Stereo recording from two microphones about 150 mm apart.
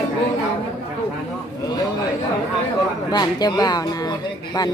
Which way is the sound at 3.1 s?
25° left (ahead or behind).